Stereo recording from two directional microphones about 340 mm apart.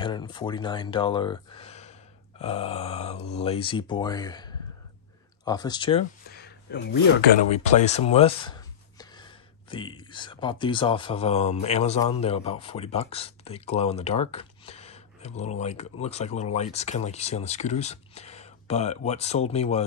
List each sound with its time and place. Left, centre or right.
0.0 s speech: centre
6.3 s a sound: left
7.4 s speech: centre